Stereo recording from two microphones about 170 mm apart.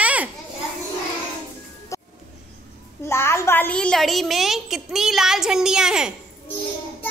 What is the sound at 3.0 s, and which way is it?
A woman's voice, 15° left (ahead or behind).